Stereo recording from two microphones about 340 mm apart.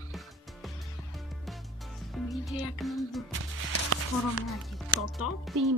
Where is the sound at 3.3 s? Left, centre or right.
Right.